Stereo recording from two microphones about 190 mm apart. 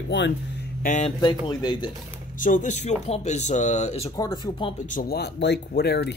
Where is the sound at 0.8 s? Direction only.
40° left (ahead or behind).